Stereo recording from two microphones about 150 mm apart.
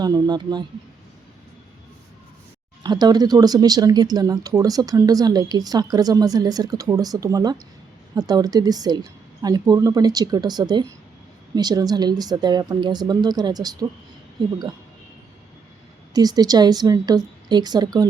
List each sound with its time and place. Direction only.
0.0 s speech: 25° right (ahead or behind)
2.8 s speech: 25° right (ahead or behind)
16.1 s speech: 25° right (ahead or behind)